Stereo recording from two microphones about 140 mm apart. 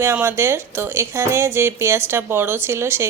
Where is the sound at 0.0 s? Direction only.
15° right (ahead or behind).